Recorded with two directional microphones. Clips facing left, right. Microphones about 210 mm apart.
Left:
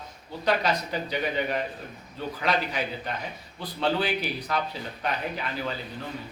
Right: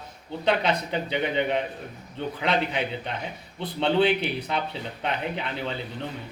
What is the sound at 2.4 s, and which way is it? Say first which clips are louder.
Speech: right 2 dB; 25° right (ahead or behind).